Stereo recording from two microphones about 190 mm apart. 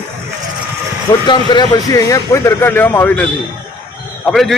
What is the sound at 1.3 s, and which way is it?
A man's voice, 25° left (ahead or behind).